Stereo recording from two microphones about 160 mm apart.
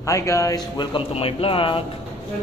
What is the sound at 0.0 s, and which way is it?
Speech, 20° left (ahead or behind).